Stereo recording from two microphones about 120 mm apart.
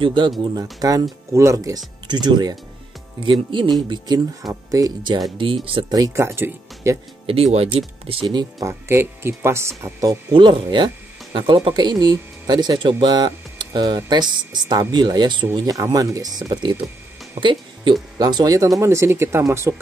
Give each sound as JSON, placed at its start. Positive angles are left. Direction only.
{"t": 0.0, "sound": "speech", "side_deg": -40}
{"t": 3.9, "sound": "speech", "side_deg": -30}
{"t": 5.4, "sound": "speech", "side_deg": -50}
{"t": 5.9, "sound": "speech", "side_deg": -30}
{"t": 7.2, "sound": "speech", "side_deg": -55}
{"t": 8.3, "sound": "speech", "side_deg": -35}
{"t": 8.6, "sound": "speech", "side_deg": -20}
{"t": 10.3, "sound": "speech", "side_deg": -40}